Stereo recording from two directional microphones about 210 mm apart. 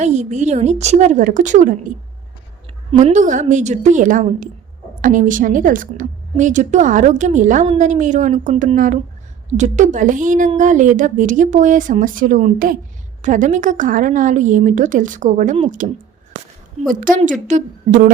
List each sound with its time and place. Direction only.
0.0 s a woman's voice: 35° right (ahead or behind)
2.9 s a woman's voice: 35° right (ahead or behind)
16.9 s a woman's voice: 40° right (ahead or behind)